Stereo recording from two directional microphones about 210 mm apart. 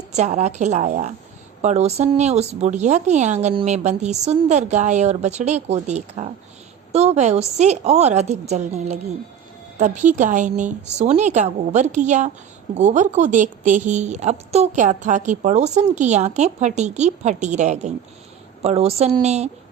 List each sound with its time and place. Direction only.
0.1 s a woman's voice: 35° right (ahead or behind)